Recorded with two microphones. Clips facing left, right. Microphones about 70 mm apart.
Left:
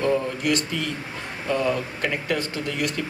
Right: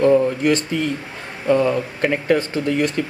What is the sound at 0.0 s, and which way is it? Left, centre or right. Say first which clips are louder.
Speech: right 8 dB; right.